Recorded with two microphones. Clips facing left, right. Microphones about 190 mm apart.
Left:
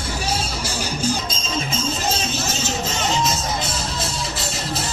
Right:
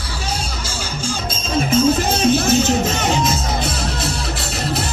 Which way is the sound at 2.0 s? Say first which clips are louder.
Right 9 dB; 60° right (ahead or behind).